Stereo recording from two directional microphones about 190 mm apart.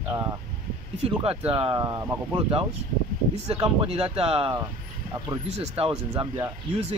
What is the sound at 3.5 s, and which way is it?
Speech, 30° right (ahead or behind).